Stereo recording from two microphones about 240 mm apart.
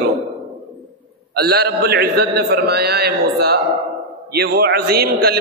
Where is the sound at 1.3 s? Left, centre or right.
Right.